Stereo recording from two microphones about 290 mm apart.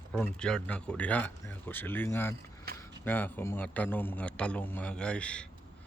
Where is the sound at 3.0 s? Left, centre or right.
Centre.